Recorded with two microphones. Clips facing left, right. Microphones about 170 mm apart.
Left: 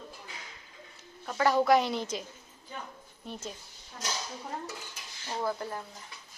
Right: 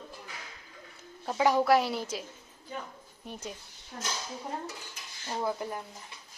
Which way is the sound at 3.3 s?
15° right (ahead or behind).